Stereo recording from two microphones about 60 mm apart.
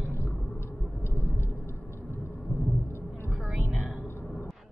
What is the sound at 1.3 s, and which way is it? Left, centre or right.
Vehicle, left.